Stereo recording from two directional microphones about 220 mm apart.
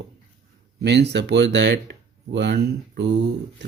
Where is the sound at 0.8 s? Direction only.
50° right (ahead or behind).